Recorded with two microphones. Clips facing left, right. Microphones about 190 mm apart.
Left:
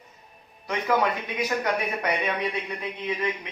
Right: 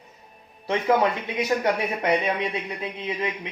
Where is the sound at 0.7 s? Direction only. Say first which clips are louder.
Right 3 dB; 25° right (ahead or behind).